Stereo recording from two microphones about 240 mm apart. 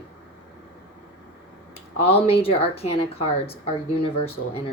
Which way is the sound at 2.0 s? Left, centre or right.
Left.